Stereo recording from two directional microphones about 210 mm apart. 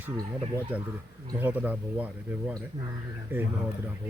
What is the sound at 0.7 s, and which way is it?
Speech, 10° right (ahead or behind).